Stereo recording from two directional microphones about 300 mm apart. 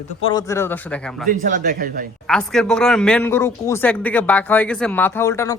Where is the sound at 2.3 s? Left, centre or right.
Centre.